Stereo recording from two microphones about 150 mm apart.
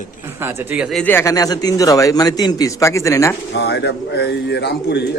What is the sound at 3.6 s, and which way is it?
Speech, 90° left.